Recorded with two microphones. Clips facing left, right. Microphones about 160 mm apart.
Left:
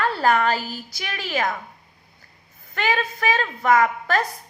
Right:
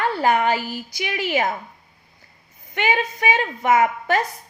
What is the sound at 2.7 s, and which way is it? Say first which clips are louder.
A woman's voice: right 2 dB; 20° right (ahead or behind).